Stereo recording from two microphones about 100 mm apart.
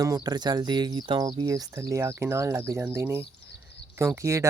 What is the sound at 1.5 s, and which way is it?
Speech, 35° right (ahead or behind).